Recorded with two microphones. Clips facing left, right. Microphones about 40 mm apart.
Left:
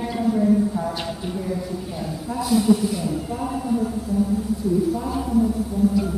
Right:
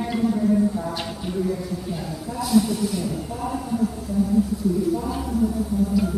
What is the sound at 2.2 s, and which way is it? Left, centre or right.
Speech, centre.